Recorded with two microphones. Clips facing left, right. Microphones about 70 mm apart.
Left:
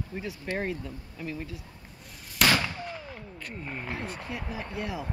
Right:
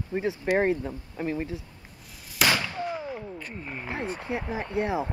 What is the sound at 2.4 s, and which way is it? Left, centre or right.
Fireworks, centre.